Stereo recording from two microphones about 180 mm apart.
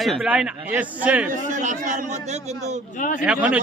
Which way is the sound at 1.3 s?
45° right (ahead or behind).